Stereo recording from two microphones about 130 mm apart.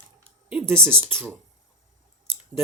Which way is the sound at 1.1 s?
5° left (ahead or behind).